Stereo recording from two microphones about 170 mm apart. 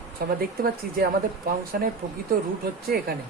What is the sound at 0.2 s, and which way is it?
Speech, 65° right (ahead or behind).